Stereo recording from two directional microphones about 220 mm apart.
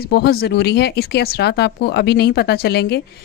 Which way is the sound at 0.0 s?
45° left (ahead or behind).